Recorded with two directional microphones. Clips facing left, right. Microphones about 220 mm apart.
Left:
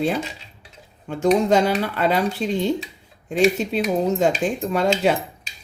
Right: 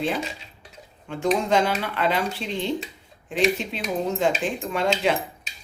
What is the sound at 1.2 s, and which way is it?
Speech, 40° left (ahead or behind).